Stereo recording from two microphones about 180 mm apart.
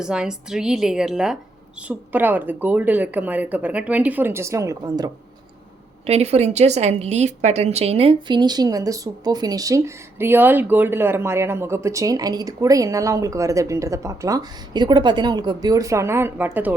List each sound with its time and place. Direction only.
0.0 s a woman's voice: 5° right (ahead or behind); by 5.1 s 20° right (ahead or behind)
6.1 s a woman's voice: 35° right (ahead or behind); by 16.7 s 10° right (ahead or behind)